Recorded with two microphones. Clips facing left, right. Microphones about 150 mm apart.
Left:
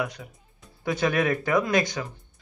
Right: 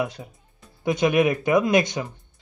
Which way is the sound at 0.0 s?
25° right (ahead or behind).